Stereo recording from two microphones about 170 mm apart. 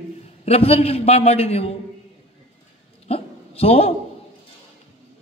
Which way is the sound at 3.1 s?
35° left (ahead or behind).